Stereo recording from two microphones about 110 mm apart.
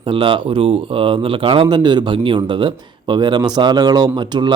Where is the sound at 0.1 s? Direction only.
55° right (ahead or behind).